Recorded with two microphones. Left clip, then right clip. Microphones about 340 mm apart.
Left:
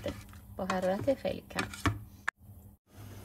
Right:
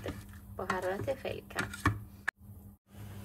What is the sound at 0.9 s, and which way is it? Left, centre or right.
Speech, left.